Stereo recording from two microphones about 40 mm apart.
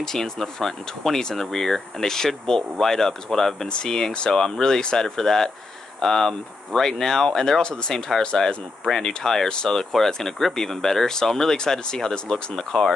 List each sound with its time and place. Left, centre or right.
0.0 s speech: centre
3.6 s speech: left